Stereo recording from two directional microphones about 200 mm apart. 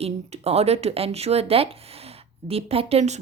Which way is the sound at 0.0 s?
30° right (ahead or behind).